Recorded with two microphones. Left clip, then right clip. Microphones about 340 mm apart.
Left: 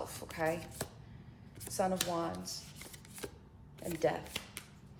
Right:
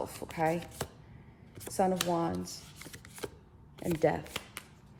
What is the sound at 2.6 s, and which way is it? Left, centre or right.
Shuffling cards, centre.